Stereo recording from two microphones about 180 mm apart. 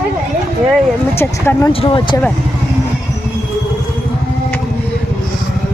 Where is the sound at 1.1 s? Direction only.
15° left (ahead or behind).